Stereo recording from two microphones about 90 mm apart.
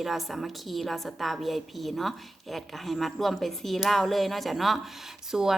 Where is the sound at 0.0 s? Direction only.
Centre (ahead or behind).